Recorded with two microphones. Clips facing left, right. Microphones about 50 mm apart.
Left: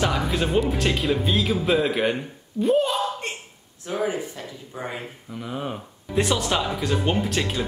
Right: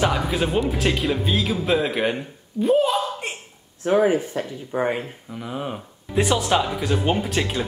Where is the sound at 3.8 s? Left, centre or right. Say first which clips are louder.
Right 8 dB; right.